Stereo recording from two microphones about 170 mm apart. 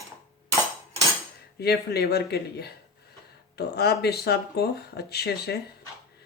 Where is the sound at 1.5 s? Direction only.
70° left (ahead or behind).